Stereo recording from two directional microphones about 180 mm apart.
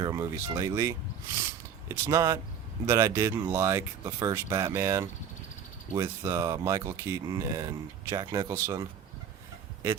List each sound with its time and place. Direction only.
0.0 s speech: 20° right (ahead or behind)